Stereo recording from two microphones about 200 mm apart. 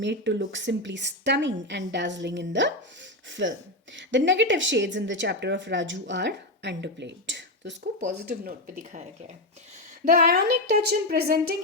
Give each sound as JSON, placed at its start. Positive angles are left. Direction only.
{"t": 0.0, "sound": "a woman's voice", "side_deg": -60}
{"t": 10.1, "sound": "speech", "side_deg": -50}